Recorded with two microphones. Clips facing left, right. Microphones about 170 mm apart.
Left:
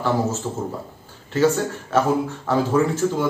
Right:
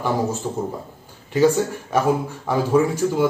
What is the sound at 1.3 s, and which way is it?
A man's voice, 15° right (ahead or behind).